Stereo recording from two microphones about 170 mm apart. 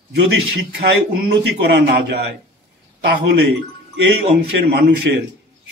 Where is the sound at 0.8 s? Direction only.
80° right.